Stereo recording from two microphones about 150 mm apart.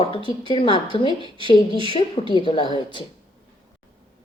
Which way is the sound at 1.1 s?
35° right (ahead or behind).